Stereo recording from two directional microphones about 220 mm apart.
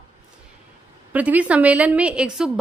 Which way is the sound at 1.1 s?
5° right (ahead or behind).